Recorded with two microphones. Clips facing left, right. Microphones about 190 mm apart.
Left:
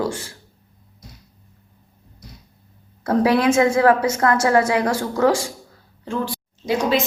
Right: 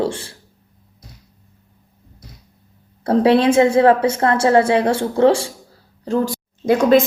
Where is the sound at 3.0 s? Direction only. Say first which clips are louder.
Right 4 dB; 30° right (ahead or behind).